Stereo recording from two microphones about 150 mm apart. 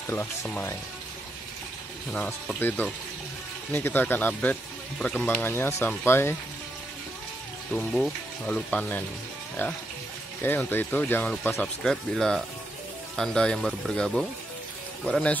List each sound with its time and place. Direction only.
0.0 s speech: 15° left (ahead or behind)
2.1 s speech: 5° left (ahead or behind)
7.7 s speech: centre (ahead or behind)